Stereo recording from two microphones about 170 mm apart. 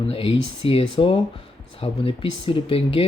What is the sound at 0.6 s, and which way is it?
Speech, 35° left (ahead or behind).